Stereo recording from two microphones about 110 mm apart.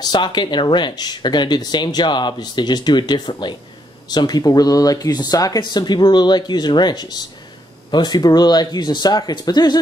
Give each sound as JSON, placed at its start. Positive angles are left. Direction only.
{"t": 0.0, "sound": "speech", "side_deg": 40}